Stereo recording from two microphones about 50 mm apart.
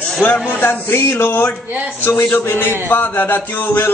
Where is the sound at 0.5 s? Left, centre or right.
Left.